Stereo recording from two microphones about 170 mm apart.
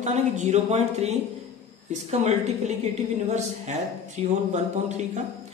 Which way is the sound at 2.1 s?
40° right (ahead or behind).